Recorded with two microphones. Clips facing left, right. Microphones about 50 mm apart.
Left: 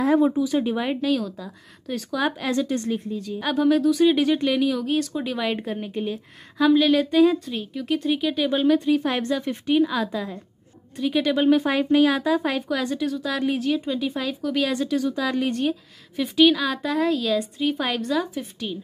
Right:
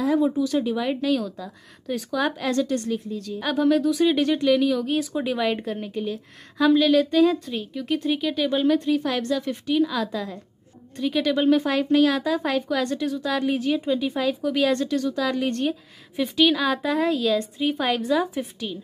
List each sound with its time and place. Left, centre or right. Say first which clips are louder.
0.0 s speech: left 2 dB; left
0.4 s a woman's voice: left 1 dB; centre
1.0 s a woman's voice: even; centre
2.7 s a woman's voice: even; left
3.3 s a woman's voice: even; centre
9.0 s a woman's voice: even; left; by 18.3 s centre